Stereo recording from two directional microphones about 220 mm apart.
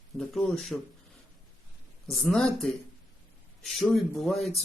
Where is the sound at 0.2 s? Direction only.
Centre (ahead or behind).